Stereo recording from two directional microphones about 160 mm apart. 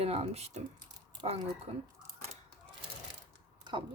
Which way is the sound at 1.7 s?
35° right (ahead or behind).